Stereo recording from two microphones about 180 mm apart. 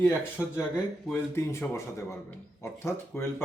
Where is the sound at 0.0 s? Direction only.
10° left (ahead or behind).